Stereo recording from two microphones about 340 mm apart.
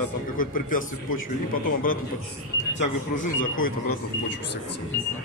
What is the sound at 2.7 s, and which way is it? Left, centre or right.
Speech, left.